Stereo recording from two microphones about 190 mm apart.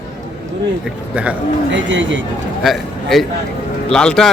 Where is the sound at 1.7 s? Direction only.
75° right (ahead or behind).